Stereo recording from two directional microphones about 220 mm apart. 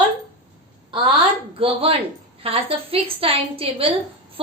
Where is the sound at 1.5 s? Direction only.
25° right (ahead or behind).